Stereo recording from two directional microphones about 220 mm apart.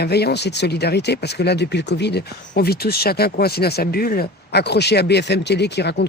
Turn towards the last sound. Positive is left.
turn(degrees=50)  # may be behind; listen again after turning